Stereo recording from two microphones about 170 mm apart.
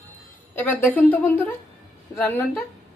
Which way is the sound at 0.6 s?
10° left (ahead or behind).